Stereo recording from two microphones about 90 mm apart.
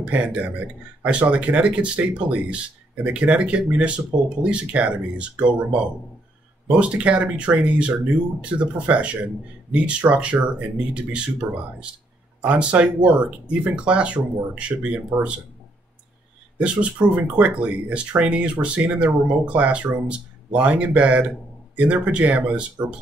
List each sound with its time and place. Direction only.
0.0 s speech: 15° right (ahead or behind)
16.5 s speech: 15° right (ahead or behind)